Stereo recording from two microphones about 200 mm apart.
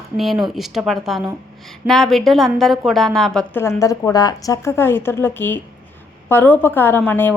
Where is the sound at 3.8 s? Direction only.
15° left (ahead or behind).